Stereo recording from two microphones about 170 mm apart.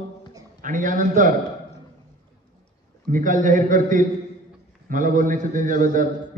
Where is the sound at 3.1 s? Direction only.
50° right (ahead or behind).